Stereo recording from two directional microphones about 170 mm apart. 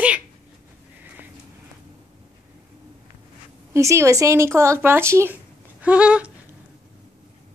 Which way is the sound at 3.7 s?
15° right (ahead or behind).